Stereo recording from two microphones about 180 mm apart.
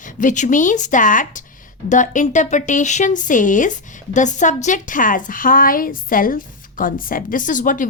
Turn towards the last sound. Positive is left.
turn(degrees=45)  # may be behind; listen again after turning